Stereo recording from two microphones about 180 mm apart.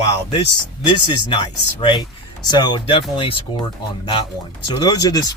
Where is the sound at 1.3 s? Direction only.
25° left (ahead or behind).